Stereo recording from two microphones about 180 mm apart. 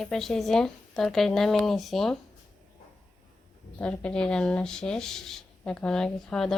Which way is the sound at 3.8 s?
5° left (ahead or behind).